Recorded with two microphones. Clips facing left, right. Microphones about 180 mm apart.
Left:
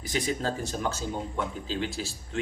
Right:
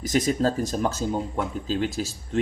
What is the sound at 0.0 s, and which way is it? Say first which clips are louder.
A man's voice: right 7 dB; 45° right (ahead or behind).